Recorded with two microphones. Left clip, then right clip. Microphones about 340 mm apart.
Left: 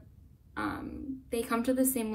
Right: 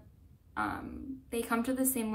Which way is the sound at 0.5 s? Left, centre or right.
Centre.